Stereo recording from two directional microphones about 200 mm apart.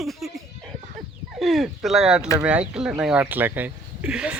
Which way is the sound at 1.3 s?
Centre (ahead or behind).